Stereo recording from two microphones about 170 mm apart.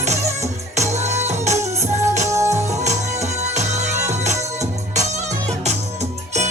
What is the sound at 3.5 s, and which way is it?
Music, 40° right (ahead or behind).